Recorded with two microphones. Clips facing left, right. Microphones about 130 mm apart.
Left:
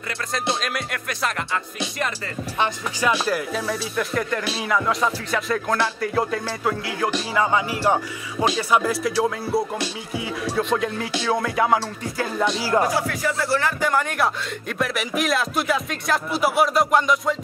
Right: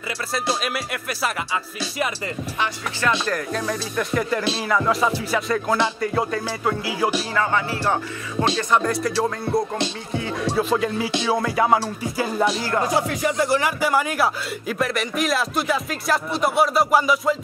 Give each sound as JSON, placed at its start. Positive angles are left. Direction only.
{"t": 0.6, "sound": "a man's voice", "side_deg": -5}
{"t": 2.6, "sound": "a man's voice", "side_deg": 10}
{"t": 7.3, "sound": "a man's voice", "side_deg": 15}
{"t": 11.1, "sound": "music", "side_deg": -20}
{"t": 11.3, "sound": "a man's voice", "side_deg": 0}
{"t": 12.9, "sound": "a man's voice", "side_deg": -20}